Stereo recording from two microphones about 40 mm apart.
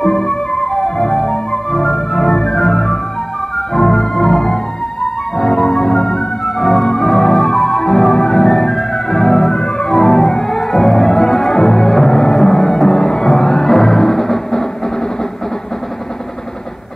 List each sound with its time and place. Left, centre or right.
0.0 s music: centre
1.7 s organ: centre
2.7 s music: centre
3.5 s organ: centre
5.0 s music: centre
6.6 s organ: centre
6.9 s music: centre
9.8 s music: centre